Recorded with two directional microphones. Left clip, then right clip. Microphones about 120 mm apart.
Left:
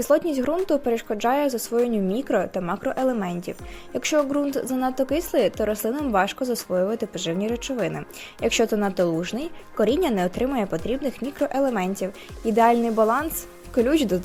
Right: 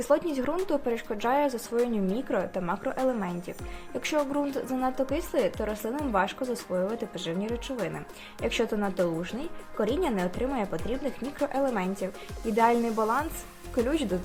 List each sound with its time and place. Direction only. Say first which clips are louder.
0.0 s a woman's voice: left 5 dB; 45° left (ahead or behind)
4.0 s a woman's voice: left 6 dB; 45° left (ahead or behind)